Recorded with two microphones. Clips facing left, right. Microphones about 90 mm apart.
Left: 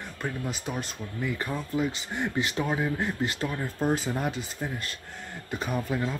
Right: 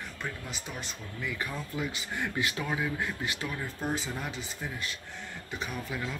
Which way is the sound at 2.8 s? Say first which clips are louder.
Left 4 dB; 35° left (ahead or behind).